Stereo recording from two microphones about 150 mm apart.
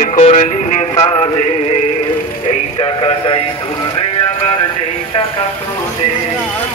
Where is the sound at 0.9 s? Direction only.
40° left (ahead or behind).